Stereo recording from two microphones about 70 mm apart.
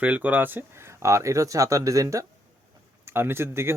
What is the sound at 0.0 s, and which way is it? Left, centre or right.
Speech, right.